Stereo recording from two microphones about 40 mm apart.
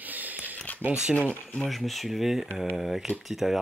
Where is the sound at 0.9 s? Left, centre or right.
Right.